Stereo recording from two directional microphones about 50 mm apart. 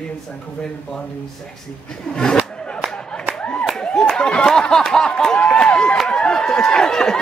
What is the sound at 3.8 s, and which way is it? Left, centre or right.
Speech, centre.